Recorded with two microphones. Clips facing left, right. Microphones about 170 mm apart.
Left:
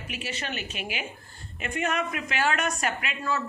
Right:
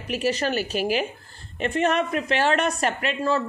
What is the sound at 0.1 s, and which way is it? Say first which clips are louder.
Speech: right 12 dB; 40° right (ahead or behind).